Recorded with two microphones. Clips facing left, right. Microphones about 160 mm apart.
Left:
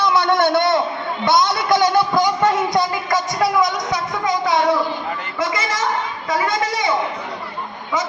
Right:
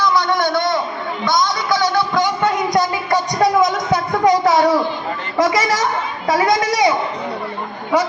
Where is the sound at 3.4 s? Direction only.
55° right (ahead or behind).